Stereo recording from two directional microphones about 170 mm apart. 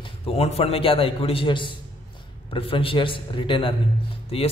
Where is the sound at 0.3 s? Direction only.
35° left (ahead or behind).